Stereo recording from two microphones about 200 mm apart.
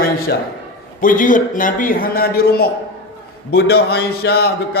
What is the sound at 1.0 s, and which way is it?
A man's voice, 40° left (ahead or behind).